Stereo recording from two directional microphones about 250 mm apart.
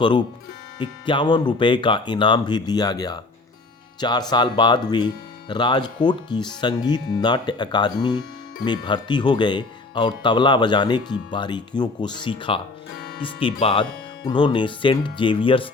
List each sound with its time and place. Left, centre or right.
0.0 s speech: centre